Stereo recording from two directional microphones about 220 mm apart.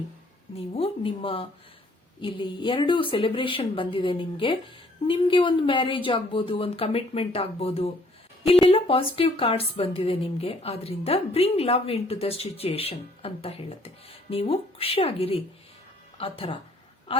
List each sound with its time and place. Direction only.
0.5 s speech: 25° left (ahead or behind)